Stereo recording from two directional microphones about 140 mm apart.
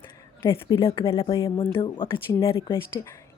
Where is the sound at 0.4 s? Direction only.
40° left (ahead or behind).